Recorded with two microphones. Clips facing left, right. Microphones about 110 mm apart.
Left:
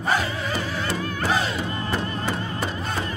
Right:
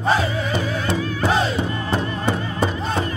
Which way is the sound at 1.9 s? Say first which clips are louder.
Right 5 dB; 25° right (ahead or behind).